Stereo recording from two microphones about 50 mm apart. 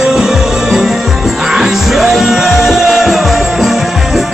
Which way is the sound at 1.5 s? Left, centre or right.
Centre.